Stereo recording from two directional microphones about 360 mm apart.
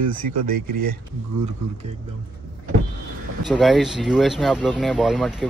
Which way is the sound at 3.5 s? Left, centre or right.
Centre.